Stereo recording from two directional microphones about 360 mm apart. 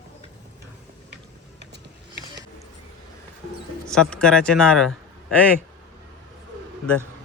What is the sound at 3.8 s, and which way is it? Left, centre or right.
Speech, centre.